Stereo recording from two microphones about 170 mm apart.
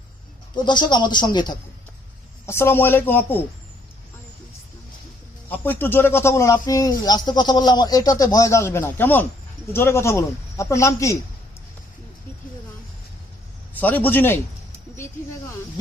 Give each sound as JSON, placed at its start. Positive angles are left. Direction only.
{"t": 0.5, "sound": "speech", "side_deg": 25}
{"t": 2.5, "sound": "a man's voice", "side_deg": 15}
{"t": 5.5, "sound": "a man's voice", "side_deg": 10}
{"t": 13.7, "sound": "a man's voice", "side_deg": 10}